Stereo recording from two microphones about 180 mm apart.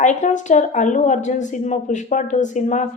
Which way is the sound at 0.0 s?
45° left (ahead or behind).